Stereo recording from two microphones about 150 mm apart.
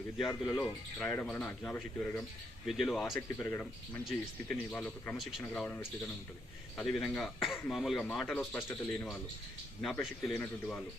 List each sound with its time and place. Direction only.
0.2 s speech: centre (ahead or behind)
2.6 s speech: centre (ahead or behind)
3.2 s speech: 15° left (ahead or behind)
8.4 s speech: 15° left (ahead or behind)
9.8 s speech: centre (ahead or behind)
10.3 s speech: 15° left (ahead or behind)